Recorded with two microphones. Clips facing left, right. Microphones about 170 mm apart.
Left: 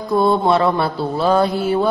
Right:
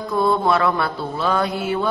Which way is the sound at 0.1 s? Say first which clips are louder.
Left 4 dB; 30° left (ahead or behind).